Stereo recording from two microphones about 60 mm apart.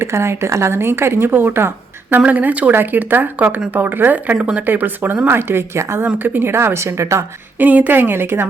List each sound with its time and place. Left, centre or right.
0.0 s speech: right
4.4 s speech: centre
4.6 s a woman's voice: right
7.6 s speech: right